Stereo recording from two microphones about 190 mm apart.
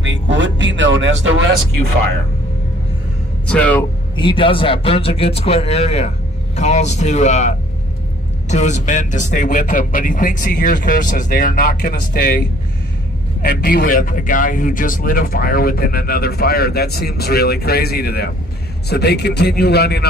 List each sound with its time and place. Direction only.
0.0 s vehicle: 75° right (ahead or behind)
3.4 s speech: 5° left (ahead or behind)
4.2 s a man's voice: 25° left (ahead or behind); by 20.1 s 60° left (ahead or behind)